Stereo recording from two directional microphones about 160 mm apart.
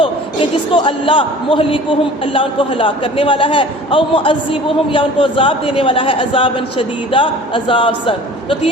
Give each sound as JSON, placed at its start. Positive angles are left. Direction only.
{"t": 0.7, "sound": "a man's voice", "side_deg": 30}